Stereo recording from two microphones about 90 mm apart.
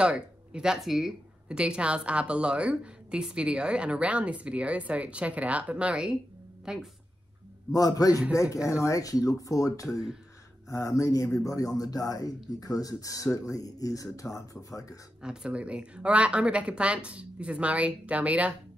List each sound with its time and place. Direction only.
0.0 s a woman's voice: 10° right (ahead or behind)
7.7 s speech: 40° left (ahead or behind)
15.2 s speech: 10° right (ahead or behind)